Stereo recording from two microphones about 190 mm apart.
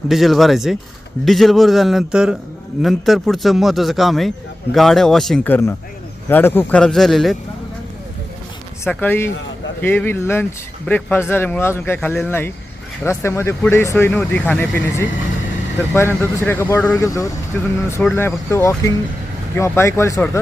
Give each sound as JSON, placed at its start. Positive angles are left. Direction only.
{"t": 0.1, "sound": "speech", "side_deg": 0}
{"t": 8.8, "sound": "speech", "side_deg": 10}